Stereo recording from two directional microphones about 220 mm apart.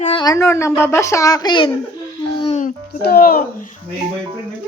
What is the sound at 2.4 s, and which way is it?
Babbling, 30° left (ahead or behind).